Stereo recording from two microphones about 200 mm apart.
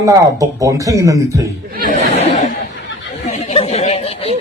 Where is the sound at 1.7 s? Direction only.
45° right (ahead or behind).